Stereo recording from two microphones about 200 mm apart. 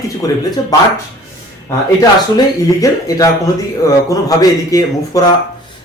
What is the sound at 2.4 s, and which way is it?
Speech, 15° left (ahead or behind).